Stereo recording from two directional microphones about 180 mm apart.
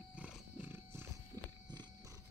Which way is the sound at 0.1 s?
5° right (ahead or behind).